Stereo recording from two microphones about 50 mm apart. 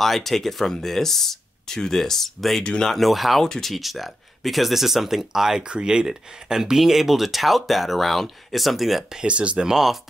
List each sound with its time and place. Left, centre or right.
0.0 s speech: centre
2.6 s speech: centre
2.9 s speech: centre
3.4 s speech: centre
3.7 s speech: centre
9.2 s speech: right